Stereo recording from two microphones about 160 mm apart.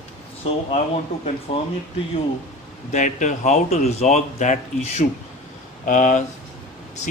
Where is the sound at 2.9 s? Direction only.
50° left (ahead or behind).